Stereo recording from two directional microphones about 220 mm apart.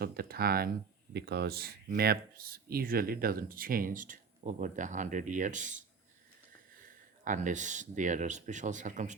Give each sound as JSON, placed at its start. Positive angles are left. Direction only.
{"t": 0.0, "sound": "speech", "side_deg": -45}
{"t": 7.3, "sound": "speech", "side_deg": -35}